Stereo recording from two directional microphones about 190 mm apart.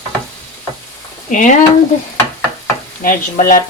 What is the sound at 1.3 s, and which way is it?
Speech, 45° left (ahead or behind).